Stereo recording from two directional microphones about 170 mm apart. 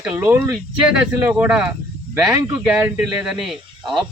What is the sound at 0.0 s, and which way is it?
Speech, 10° right (ahead or behind).